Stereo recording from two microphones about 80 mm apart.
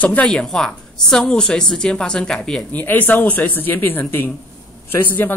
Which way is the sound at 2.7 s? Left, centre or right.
Left.